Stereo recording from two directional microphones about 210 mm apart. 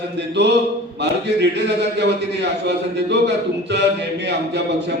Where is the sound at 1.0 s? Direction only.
55° right (ahead or behind).